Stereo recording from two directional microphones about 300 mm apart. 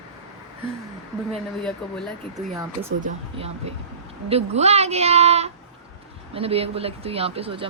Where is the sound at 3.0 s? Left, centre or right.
Right.